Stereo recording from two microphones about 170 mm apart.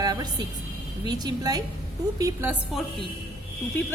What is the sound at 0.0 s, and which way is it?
Music, 25° right (ahead or behind).